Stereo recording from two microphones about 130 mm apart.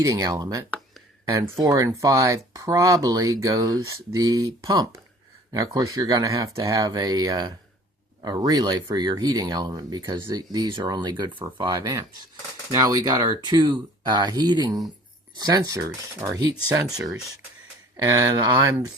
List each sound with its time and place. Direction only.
0.0 s speech: 25° right (ahead or behind)